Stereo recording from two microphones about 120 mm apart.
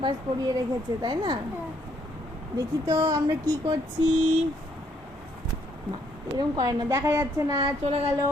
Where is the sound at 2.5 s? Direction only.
30° right (ahead or behind).